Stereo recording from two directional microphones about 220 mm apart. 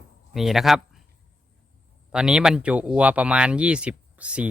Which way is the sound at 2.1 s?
5° right (ahead or behind).